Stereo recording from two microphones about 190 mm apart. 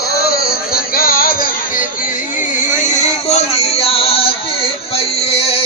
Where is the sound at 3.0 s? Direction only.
35° left (ahead or behind).